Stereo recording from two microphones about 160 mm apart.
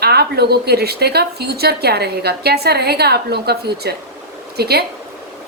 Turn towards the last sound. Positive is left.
turn(degrees=-80)